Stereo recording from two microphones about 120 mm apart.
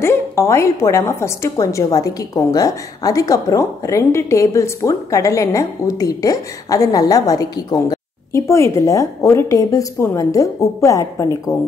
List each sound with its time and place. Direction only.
0.0 s a woman's voice: 20° left (ahead or behind)